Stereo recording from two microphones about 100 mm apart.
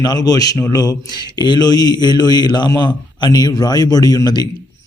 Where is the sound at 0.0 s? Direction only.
40° left (ahead or behind).